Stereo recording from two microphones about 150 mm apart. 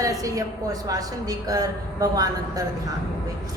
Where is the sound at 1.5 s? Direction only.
25° right (ahead or behind).